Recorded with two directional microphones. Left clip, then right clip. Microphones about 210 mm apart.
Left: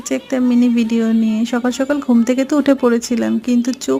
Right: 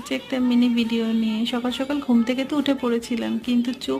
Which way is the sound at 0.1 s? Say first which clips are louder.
Left 6 dB; 20° left (ahead or behind).